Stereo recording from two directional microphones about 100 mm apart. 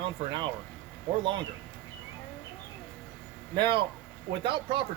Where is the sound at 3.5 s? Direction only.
55° right (ahead or behind).